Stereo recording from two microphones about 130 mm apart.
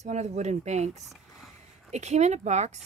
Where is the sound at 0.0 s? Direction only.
60° right (ahead or behind).